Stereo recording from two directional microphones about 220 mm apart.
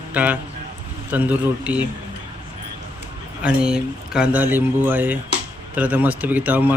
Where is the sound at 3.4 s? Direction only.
5° right (ahead or behind).